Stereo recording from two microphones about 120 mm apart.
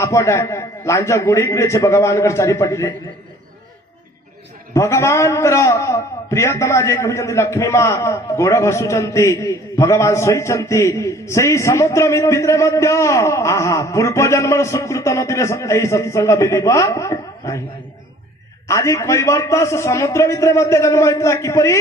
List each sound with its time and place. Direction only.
0.0 s a man's voice: 25° left (ahead or behind)
4.7 s a man's voice: 25° left (ahead or behind)
18.7 s a man's voice: 25° left (ahead or behind)